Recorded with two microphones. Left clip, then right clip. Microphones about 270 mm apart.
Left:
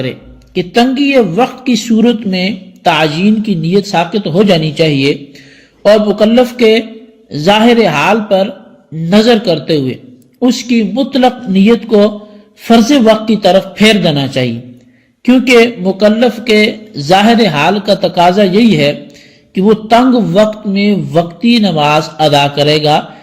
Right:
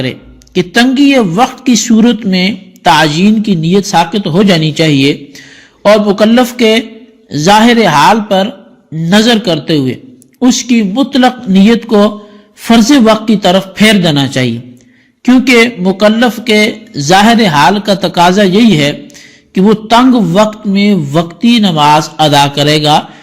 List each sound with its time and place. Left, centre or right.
0.0 s a man's voice: right